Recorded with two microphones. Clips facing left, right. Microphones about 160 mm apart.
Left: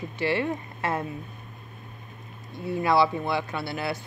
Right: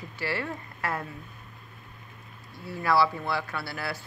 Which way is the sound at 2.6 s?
20° left (ahead or behind).